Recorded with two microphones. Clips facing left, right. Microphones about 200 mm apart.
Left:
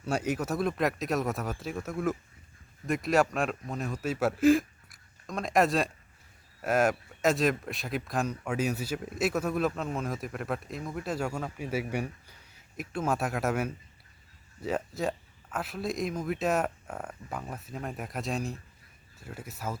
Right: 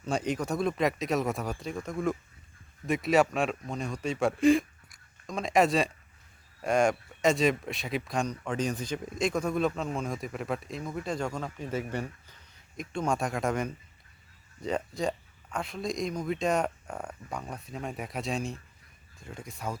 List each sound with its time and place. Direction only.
0.0 s a man's voice: 5° left (ahead or behind)